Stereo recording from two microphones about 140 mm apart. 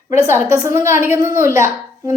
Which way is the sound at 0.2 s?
20° right (ahead or behind).